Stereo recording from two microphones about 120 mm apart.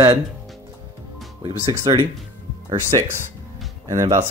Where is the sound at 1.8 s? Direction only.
30° right (ahead or behind).